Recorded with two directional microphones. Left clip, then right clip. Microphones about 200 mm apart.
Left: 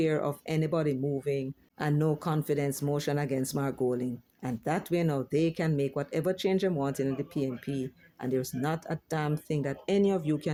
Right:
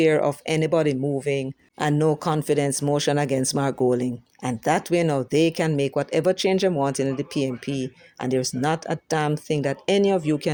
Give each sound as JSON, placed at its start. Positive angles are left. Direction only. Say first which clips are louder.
{"t": 0.0, "sound": "speech", "louder": "right 10 dB", "side_deg": -30}